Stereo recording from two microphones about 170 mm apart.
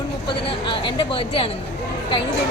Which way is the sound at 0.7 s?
30° left (ahead or behind).